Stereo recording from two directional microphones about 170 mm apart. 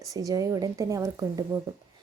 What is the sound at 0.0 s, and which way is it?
A woman's voice, 20° right (ahead or behind).